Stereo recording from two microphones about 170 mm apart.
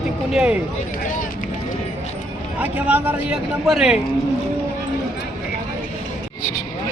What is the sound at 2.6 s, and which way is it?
A man's voice, 10° right (ahead or behind).